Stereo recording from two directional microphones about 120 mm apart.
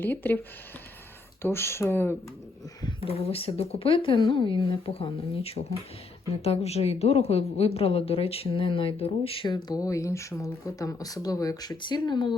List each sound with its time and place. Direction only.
0.0 s speech: 15° left (ahead or behind)
1.4 s speech: 20° left (ahead or behind)
3.0 s a woman's voice: 55° left (ahead or behind)
9.6 s speech: 30° left (ahead or behind)